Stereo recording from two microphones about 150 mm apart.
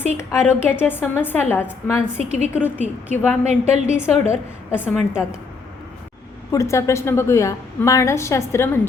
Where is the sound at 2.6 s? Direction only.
10° right (ahead or behind).